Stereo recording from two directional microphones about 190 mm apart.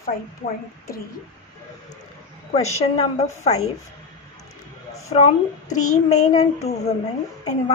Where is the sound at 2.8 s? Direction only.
35° left (ahead or behind).